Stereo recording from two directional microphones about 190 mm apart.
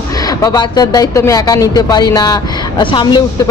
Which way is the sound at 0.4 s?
20° left (ahead or behind).